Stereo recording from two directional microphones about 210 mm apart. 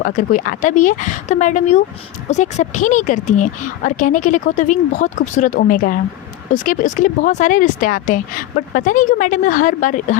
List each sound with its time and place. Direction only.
0.0 s speech: 40° left (ahead or behind)